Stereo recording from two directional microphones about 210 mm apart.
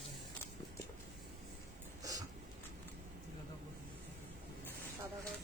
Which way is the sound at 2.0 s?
15° right (ahead or behind).